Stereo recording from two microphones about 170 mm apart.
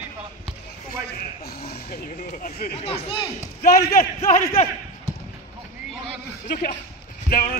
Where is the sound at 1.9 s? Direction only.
55° left (ahead or behind).